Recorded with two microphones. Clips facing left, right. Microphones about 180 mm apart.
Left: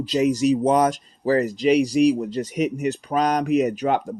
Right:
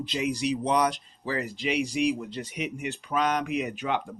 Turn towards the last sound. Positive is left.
turn(degrees=40)  # may be behind; listen again after turning